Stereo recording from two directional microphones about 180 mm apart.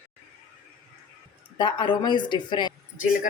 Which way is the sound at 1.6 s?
25° left (ahead or behind).